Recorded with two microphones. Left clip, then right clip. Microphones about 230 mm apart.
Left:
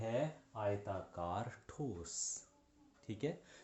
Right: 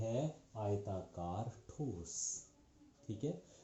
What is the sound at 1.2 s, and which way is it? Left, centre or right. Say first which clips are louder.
Speech: left 3 dB; left.